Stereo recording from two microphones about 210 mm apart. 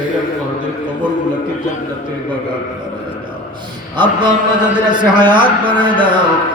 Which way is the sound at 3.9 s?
20° right (ahead or behind).